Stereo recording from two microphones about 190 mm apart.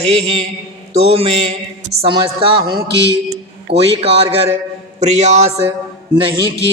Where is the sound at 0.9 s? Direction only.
35° right (ahead or behind).